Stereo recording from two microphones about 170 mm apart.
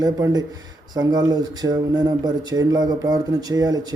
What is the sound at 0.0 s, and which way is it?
Speech, 25° right (ahead or behind).